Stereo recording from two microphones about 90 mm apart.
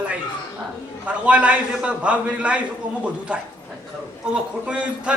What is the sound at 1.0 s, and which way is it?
A man's voice, 15° right (ahead or behind).